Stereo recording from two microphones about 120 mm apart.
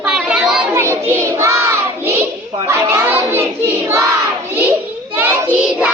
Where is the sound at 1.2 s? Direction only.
25° right (ahead or behind).